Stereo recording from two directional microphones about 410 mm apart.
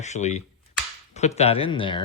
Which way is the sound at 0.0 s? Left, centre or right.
Centre.